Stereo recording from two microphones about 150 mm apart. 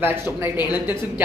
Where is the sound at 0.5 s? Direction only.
25° left (ahead or behind).